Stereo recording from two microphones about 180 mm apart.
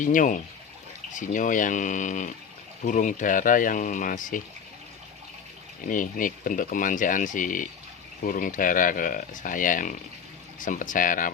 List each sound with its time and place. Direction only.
0.0 s speech: 45° left (ahead or behind)
5.9 s speech: 50° left (ahead or behind)